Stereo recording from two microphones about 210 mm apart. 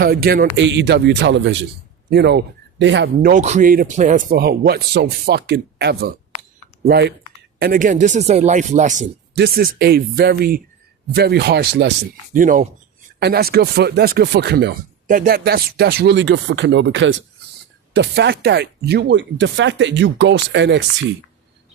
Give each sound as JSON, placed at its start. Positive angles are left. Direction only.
{"t": 0.0, "sound": "speech", "side_deg": -45}
{"t": 3.2, "sound": "speech", "side_deg": -40}
{"t": 7.6, "sound": "speech", "side_deg": -40}
{"t": 9.4, "sound": "speech", "side_deg": -45}
{"t": 12.3, "sound": "speech", "side_deg": -40}
{"t": 13.1, "sound": "speech", "side_deg": -50}